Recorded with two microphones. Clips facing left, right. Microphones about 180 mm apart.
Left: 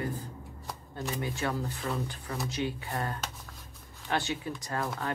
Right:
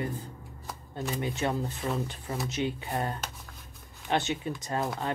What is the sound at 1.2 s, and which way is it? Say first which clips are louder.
Speech: right 3 dB; 20° right (ahead or behind).